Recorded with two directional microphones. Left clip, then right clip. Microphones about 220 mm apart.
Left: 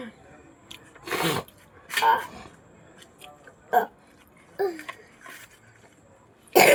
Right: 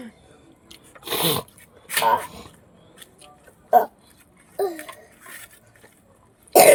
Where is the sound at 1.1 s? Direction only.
65° right (ahead or behind).